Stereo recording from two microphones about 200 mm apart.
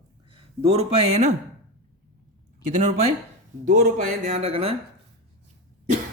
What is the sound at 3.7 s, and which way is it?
Speech, 45° right (ahead or behind).